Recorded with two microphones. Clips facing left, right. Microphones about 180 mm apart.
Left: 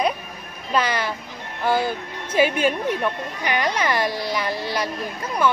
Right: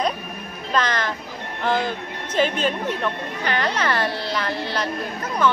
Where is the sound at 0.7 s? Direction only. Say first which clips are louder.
Left 1 dB; 10° left (ahead or behind).